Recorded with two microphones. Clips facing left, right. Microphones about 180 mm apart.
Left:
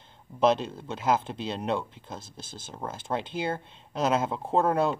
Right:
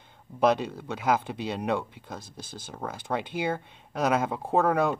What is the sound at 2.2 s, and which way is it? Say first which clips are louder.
Speech: right 2 dB; 15° right (ahead or behind).